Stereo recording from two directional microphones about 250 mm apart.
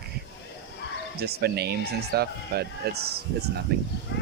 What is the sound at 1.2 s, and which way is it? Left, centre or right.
Speech, right.